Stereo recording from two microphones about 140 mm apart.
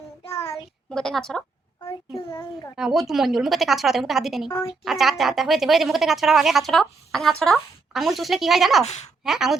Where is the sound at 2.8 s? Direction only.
Centre (ahead or behind).